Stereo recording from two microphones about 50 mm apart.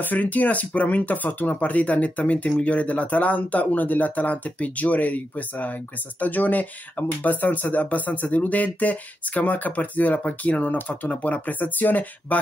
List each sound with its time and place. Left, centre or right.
0.0 s speech: left